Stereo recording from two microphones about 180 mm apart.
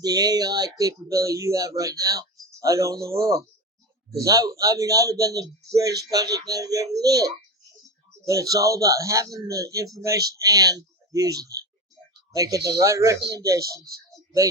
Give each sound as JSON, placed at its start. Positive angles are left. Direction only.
{"t": 0.0, "sound": "speech", "side_deg": -20}
{"t": 4.2, "sound": "speech", "side_deg": -20}
{"t": 13.1, "sound": "speech", "side_deg": -70}